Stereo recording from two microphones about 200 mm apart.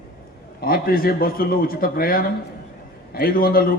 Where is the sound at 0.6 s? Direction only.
45° left (ahead or behind).